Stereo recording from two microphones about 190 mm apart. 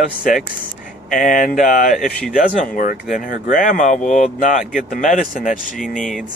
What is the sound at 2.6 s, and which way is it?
Speech, 45° left (ahead or behind).